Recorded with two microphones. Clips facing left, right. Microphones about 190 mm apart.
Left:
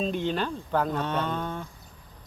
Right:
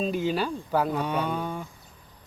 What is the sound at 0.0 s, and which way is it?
Speech, 5° right (ahead or behind).